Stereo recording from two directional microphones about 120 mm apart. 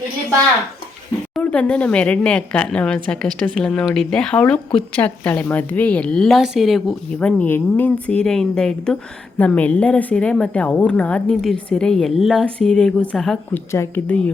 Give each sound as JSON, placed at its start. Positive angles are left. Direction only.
{"t": 1.4, "sound": "a woman's voice", "side_deg": 10}
{"t": 7.2, "sound": "a woman's voice", "side_deg": 10}
{"t": 13.5, "sound": "a woman's voice", "side_deg": 20}